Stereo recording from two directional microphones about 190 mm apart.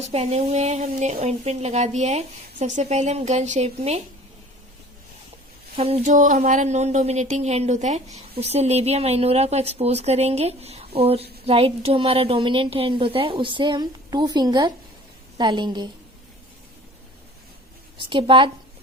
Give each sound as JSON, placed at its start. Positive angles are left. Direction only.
{"t": 0.0, "sound": "speech", "side_deg": -35}
{"t": 5.7, "sound": "a woman's voice", "side_deg": -35}
{"t": 18.1, "sound": "a woman's voice", "side_deg": -25}